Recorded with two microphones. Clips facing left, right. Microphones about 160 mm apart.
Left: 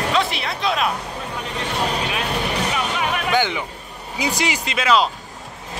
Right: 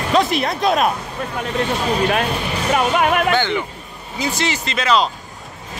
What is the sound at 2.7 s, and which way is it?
Music, 55° right (ahead or behind).